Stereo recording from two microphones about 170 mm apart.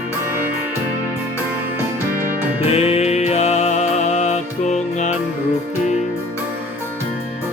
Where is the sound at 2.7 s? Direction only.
35° left (ahead or behind).